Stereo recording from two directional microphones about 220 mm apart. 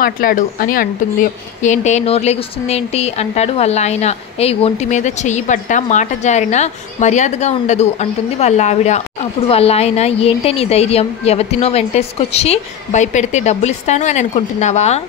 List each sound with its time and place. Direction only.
0.0 s a woman's voice: 40° left (ahead or behind)